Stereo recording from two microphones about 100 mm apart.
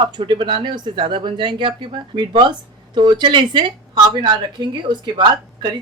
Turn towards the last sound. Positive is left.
turn(degrees=-45)  # may be behind; listen again after turning